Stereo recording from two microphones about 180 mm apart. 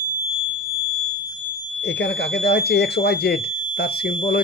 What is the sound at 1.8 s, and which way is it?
Speech, 70° left (ahead or behind).